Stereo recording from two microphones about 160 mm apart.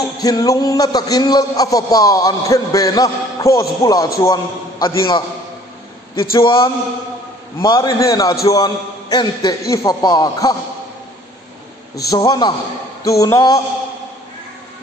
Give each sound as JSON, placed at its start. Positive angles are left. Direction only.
{"t": 0.2, "sound": "a man's voice", "side_deg": 25}
{"t": 6.3, "sound": "a sound", "side_deg": 30}
{"t": 7.6, "sound": "a man's voice", "side_deg": 25}
{"t": 12.1, "sound": "a man's voice", "side_deg": 25}